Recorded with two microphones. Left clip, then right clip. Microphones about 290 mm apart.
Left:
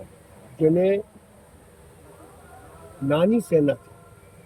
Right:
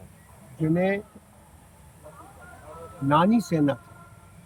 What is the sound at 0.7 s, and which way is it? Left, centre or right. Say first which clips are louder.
Speech: left 1 dB; right.